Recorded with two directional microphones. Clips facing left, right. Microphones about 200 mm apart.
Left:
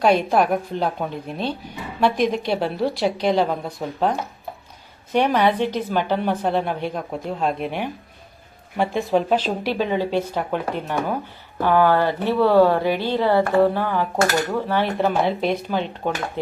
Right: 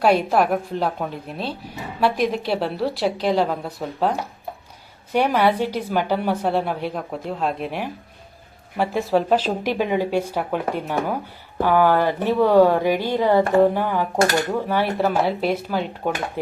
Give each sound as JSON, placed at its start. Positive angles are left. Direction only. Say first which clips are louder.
{"t": 0.0, "sound": "a woman's voice", "louder": "even", "side_deg": -5}